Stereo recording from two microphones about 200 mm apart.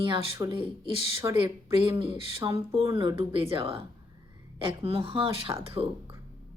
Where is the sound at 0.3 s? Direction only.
15° right (ahead or behind).